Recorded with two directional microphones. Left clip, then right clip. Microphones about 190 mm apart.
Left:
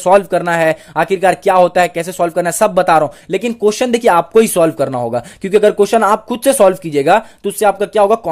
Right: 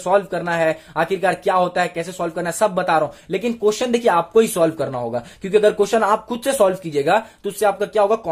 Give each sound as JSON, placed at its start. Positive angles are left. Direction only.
{"t": 0.0, "sound": "speech", "side_deg": 45}